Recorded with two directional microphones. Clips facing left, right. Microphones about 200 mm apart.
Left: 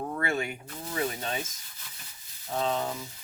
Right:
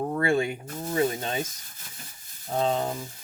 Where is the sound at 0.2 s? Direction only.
30° right (ahead or behind).